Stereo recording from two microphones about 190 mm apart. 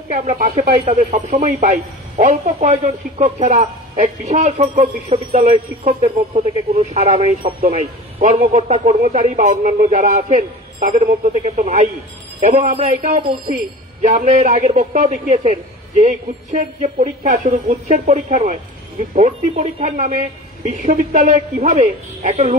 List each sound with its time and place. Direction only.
0.1 s speech: 40° right (ahead or behind)